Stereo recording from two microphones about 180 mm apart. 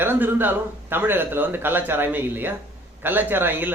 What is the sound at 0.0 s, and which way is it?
A man's voice, 10° right (ahead or behind).